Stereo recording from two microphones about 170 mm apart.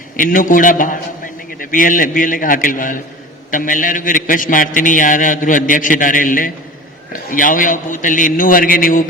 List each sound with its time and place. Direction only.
0.2 s a man's voice: 50° left (ahead or behind)